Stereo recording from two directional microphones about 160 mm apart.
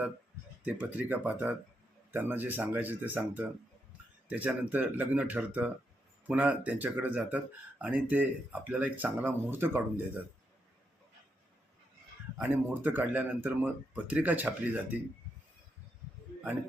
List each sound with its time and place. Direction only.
0.6 s speech: 10° right (ahead or behind)
12.4 s speech: 10° right (ahead or behind)